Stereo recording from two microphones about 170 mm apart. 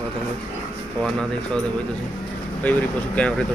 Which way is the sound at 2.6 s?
10° left (ahead or behind).